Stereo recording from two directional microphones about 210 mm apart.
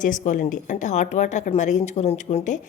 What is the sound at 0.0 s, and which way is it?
A woman's voice, 35° left (ahead or behind).